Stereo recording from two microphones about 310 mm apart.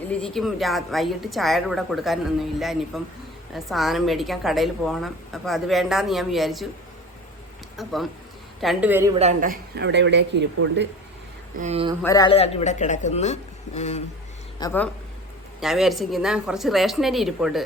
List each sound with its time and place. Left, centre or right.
0.1 s a woman's voice: centre
7.8 s a woman's voice: centre
9.1 s speech: right
11.5 s speech: right
12.0 s speech: centre
14.6 s a woman's voice: centre